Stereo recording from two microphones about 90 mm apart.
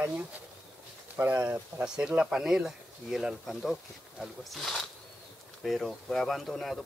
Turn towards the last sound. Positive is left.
turn(degrees=0)  # may be behind; listen again after turning